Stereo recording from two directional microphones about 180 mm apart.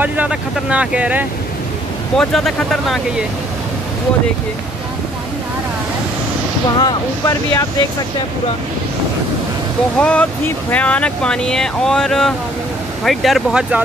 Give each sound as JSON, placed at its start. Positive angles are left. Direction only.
{"t": 0.0, "sound": "speech", "side_deg": -10}
{"t": 6.8, "sound": "speech", "side_deg": 25}
{"t": 9.9, "sound": "speech", "side_deg": 5}